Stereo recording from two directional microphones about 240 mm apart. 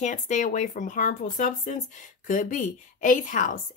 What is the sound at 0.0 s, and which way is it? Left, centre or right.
A woman's voice, left.